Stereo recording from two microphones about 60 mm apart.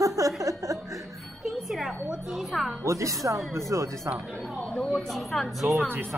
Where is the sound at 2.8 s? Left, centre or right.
Right.